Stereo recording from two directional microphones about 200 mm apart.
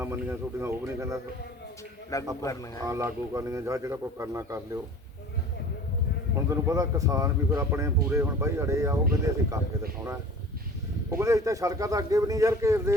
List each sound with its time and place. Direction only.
0.0 s speech: 10° right (ahead or behind)
2.4 s a man's voice: 15° left (ahead or behind)
2.8 s speech: 15° right (ahead or behind)
6.5 s speech: 15° right (ahead or behind)
11.1 s speech: 15° right (ahead or behind)